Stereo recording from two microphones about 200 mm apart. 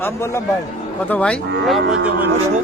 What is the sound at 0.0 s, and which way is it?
A man's voice, 15° left (ahead or behind).